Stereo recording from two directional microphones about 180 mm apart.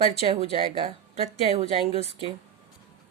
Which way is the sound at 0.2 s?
35° right (ahead or behind).